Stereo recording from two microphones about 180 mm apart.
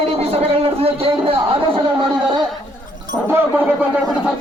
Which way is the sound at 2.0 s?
25° right (ahead or behind).